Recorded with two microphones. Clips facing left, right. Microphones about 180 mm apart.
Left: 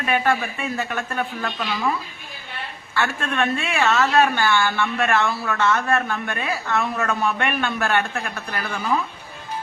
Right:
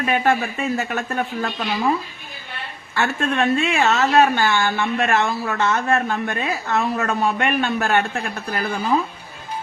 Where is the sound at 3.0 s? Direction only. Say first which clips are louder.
Right 3 dB; 35° right (ahead or behind).